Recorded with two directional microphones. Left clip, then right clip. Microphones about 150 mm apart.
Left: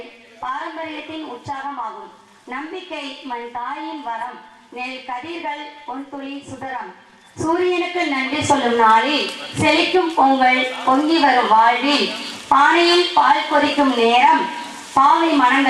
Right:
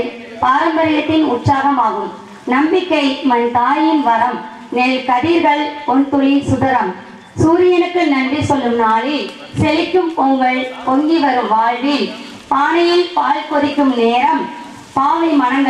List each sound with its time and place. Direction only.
0.4 s a woman's voice: 10° right (ahead or behind)
1.8 s speech: 30° right (ahead or behind)
2.5 s a woman's voice: 15° right (ahead or behind)
5.9 s speech: 25° right (ahead or behind)
6.2 s a woman's voice: 10° right (ahead or behind)
7.5 s a woman's voice: 10° right (ahead or behind)